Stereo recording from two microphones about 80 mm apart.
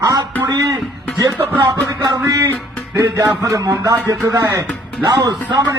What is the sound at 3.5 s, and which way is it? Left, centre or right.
Speech, right.